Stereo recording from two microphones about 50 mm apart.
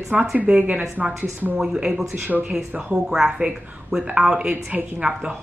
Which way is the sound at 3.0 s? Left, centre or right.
Centre.